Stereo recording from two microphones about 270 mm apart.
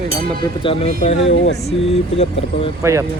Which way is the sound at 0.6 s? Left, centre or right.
Left.